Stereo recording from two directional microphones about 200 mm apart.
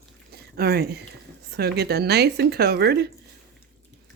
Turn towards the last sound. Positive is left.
turn(degrees=-55)  # may be behind; listen again after turning